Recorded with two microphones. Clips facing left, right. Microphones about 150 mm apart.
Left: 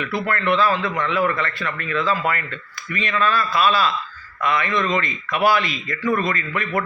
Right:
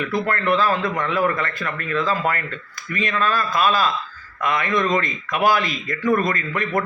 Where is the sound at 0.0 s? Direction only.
40° right (ahead or behind).